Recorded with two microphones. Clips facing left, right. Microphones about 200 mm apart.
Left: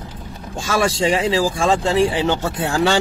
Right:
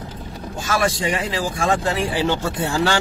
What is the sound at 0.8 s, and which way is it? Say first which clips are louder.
Speech: left 6 dB; 25° left (ahead or behind).